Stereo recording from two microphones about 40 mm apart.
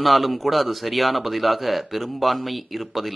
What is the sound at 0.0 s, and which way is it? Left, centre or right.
Speech, centre.